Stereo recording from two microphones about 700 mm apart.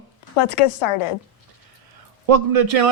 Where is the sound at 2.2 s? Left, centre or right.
Right.